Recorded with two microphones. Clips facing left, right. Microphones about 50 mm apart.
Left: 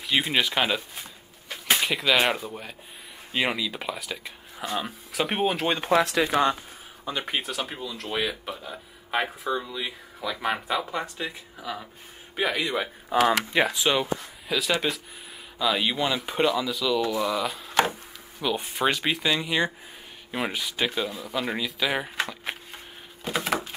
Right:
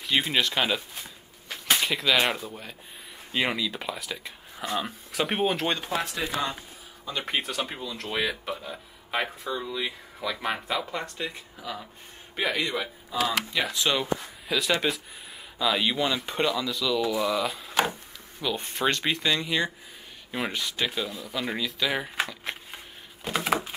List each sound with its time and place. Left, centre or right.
0.0 s speech: centre
5.9 s speech: left
7.2 s speech: centre
13.1 s speech: left
13.7 s speech: centre
14.2 s speech: centre
22.3 s a sound: centre
23.2 s a sound: centre